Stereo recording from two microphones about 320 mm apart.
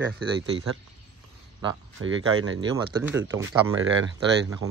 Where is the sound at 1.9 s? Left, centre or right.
Right.